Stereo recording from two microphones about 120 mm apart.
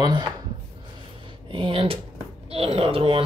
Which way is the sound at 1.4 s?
50° right (ahead or behind).